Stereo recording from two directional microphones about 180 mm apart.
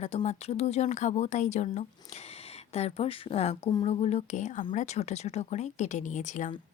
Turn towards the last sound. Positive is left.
turn(degrees=45)  # may be behind; listen again after turning